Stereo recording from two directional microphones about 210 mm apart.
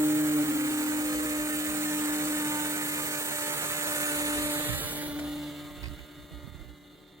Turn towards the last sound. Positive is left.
turn(degrees=0)  # may be behind; listen again after turning